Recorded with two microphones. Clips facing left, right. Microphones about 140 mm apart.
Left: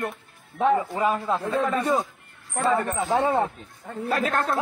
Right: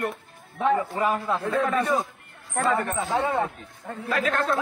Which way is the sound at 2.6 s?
30° left (ahead or behind).